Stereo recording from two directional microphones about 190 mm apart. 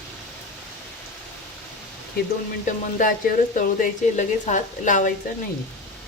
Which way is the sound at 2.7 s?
45° left (ahead or behind).